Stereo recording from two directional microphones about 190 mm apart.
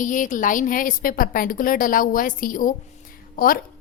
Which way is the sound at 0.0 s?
45° left (ahead or behind).